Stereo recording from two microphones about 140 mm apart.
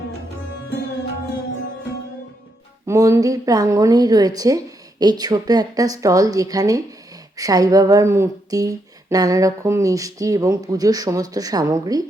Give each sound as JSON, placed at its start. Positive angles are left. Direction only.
{"t": 2.8, "sound": "speech", "side_deg": -25}